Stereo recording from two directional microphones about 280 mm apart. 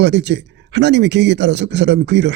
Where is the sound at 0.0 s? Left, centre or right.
Right.